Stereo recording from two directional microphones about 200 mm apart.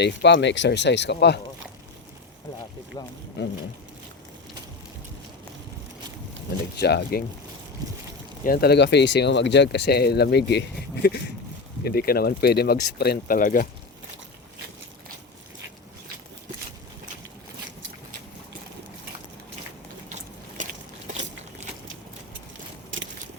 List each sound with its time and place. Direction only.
0.0 s speech: 60° left (ahead or behind)
3.0 s speech: 20° left (ahead or behind)
3.4 s speech: 55° left (ahead or behind)
6.7 s speech: 55° left (ahead or behind)
7.8 s speech: 20° right (ahead or behind)
8.4 s speech: 50° left (ahead or behind)